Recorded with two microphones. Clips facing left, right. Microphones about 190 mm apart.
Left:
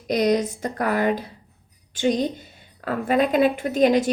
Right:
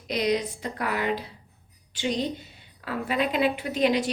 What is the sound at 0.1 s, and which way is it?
A woman's voice, 45° left (ahead or behind).